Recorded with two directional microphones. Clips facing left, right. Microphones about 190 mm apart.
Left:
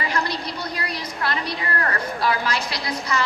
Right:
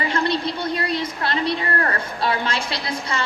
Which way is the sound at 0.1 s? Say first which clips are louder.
Right 4 dB; 25° right (ahead or behind).